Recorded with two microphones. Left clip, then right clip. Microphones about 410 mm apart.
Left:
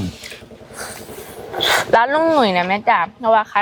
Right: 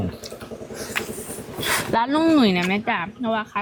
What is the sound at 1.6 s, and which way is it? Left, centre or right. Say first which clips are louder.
A woman's voice: left 7 dB; left.